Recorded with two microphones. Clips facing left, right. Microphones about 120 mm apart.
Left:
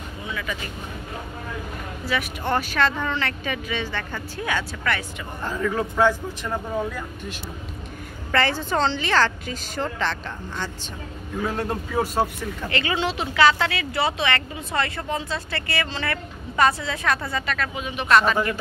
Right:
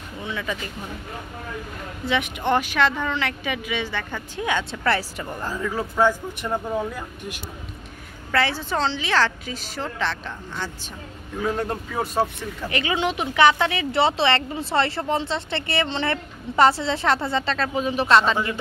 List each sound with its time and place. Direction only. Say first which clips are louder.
0.2 s speech: right 2 dB; 25° right (ahead or behind)
2.0 s speech: right 3 dB; 20° right (ahead or behind)
5.4 s speech: left 3 dB; 10° right (ahead or behind)
12.6 s speech: right 1 dB; 15° right (ahead or behind)